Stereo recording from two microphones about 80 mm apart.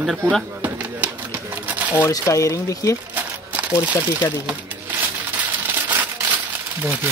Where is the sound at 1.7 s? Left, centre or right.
Centre.